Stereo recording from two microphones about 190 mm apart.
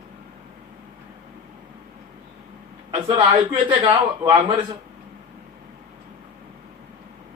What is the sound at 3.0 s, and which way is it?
Speech, 30° right (ahead or behind).